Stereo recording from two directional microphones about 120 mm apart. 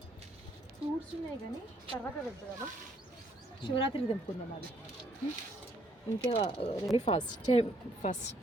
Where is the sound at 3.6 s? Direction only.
45° left (ahead or behind).